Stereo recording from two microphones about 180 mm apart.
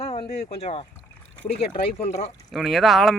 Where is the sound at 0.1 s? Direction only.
35° left (ahead or behind).